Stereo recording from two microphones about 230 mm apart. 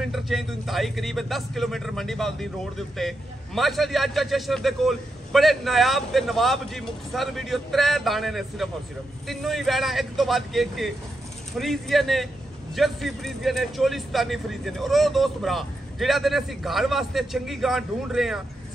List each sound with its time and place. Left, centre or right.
0.1 s speech: centre